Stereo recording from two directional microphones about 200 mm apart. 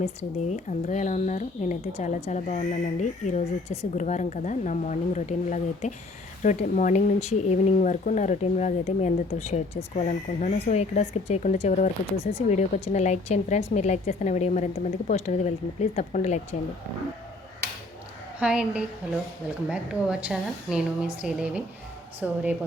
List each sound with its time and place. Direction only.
0.0 s speech: 35° left (ahead or behind)
18.3 s a woman's voice: 5° right (ahead or behind)